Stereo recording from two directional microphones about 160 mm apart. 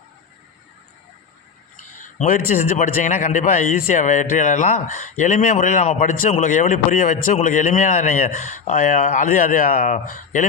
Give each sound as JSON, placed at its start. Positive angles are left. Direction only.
{"t": 2.0, "sound": "a man's voice", "side_deg": 55}